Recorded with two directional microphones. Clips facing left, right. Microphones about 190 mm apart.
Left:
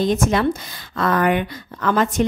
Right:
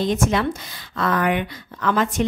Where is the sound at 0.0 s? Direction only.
40° left (ahead or behind).